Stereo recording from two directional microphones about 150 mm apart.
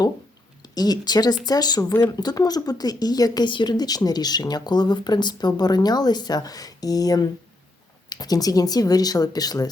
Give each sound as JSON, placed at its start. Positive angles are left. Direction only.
{"t": 0.6, "sound": "a woman's voice", "side_deg": 25}